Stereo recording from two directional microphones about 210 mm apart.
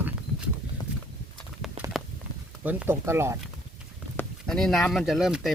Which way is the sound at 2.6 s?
10° right (ahead or behind).